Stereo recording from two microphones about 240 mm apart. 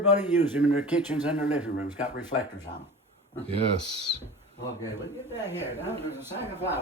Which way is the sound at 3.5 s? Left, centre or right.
Right.